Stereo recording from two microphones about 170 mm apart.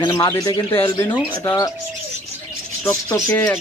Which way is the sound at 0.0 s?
25° left (ahead or behind).